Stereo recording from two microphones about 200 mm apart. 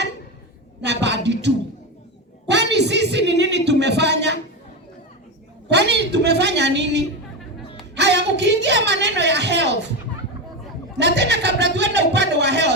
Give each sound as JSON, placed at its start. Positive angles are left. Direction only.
{"t": 0.8, "sound": "a woman's voice", "side_deg": -60}
{"t": 2.5, "sound": "a sound", "side_deg": -60}
{"t": 5.7, "sound": "a woman's voice", "side_deg": -60}
{"t": 11.0, "sound": "a woman's voice", "side_deg": -60}